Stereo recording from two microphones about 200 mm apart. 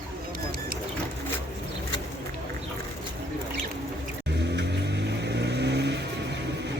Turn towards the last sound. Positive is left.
turn(degrees=-60)  # may be behind; listen again after turning